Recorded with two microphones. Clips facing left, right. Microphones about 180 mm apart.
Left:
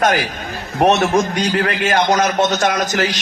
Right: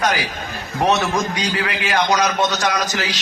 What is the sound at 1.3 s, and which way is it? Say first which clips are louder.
A man's voice: left 5 dB; 50° left (ahead or behind).